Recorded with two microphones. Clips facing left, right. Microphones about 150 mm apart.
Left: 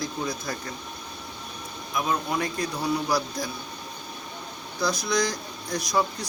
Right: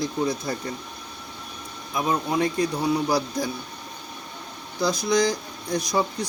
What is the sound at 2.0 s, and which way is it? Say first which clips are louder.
Speech: right 3 dB; 25° right (ahead or behind).